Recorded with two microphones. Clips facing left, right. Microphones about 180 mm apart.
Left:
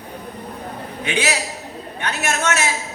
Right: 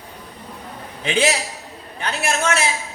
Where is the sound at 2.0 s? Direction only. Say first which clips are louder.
Right 1 dB; 30° right (ahead or behind).